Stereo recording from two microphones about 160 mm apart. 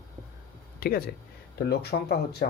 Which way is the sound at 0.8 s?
70° left (ahead or behind).